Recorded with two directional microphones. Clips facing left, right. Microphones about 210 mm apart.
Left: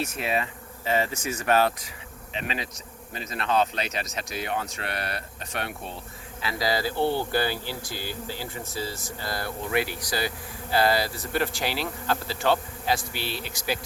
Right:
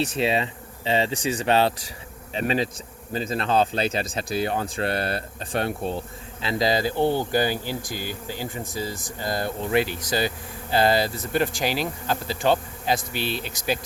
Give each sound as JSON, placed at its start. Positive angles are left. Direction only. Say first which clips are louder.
{"t": 0.0, "sound": "speech", "louder": "right 5 dB", "side_deg": -30}
{"t": 2.3, "sound": "speech", "louder": "right 8 dB", "side_deg": -40}